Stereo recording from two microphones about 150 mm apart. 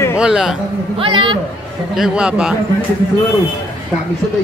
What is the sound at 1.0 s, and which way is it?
Speech, 35° right (ahead or behind).